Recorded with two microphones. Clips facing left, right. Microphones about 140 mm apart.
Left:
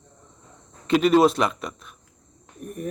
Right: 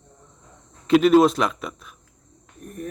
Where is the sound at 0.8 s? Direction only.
Centre (ahead or behind).